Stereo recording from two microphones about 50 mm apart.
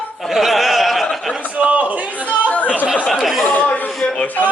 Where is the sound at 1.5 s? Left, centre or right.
Right.